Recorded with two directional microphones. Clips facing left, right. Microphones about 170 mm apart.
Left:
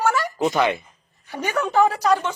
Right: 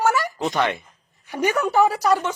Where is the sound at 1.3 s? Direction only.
15° right (ahead or behind).